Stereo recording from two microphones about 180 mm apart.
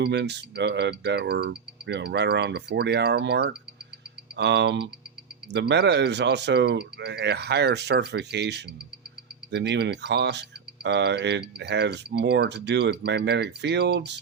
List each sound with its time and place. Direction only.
0.0 s speech: 70° right (ahead or behind)